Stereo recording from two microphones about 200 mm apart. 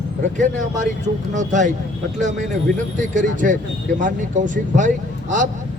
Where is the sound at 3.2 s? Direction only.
40° right (ahead or behind).